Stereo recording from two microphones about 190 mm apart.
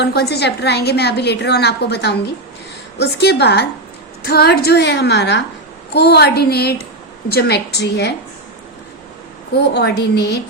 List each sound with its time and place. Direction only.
0.0 s a woman's voice: 60° left (ahead or behind)
9.5 s a woman's voice: 60° left (ahead or behind)